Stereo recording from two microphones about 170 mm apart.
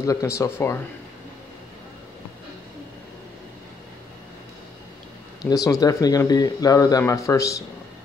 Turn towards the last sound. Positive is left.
turn(degrees=20)  # may be behind; listen again after turning